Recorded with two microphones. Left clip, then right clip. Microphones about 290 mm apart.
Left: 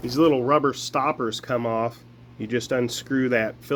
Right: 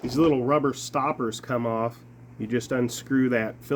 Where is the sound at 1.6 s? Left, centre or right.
Left.